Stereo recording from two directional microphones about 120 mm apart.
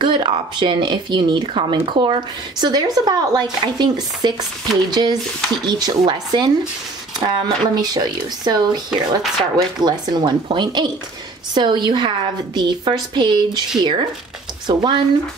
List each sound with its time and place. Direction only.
0.0 s speech: 40° right (ahead or behind)
9.2 s speech: centre (ahead or behind)
9.8 s speech: 35° right (ahead or behind)